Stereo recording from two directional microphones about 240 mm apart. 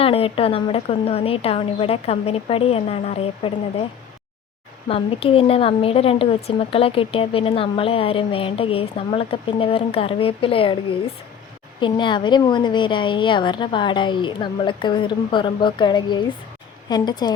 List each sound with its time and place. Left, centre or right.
0.0 s a woman's voice: left
4.9 s a woman's voice: left